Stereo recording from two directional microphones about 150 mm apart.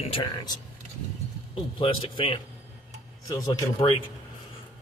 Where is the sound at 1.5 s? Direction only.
40° left (ahead or behind).